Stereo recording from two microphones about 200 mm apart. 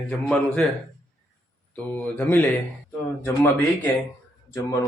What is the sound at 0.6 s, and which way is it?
Speech, 10° left (ahead or behind).